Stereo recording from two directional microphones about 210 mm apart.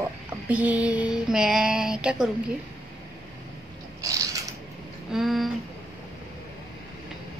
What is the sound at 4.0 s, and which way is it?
Mechanisms, 15° right (ahead or behind).